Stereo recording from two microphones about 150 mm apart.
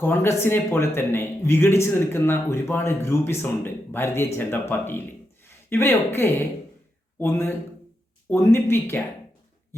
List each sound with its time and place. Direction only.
0.0 s a man's voice: 15° left (ahead or behind)